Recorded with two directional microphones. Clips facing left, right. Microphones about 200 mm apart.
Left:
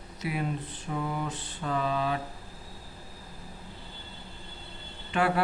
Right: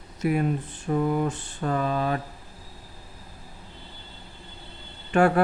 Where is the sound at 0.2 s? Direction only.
50° right (ahead or behind).